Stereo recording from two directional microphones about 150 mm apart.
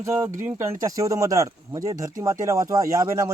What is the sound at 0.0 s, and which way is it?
Speech, 20° right (ahead or behind).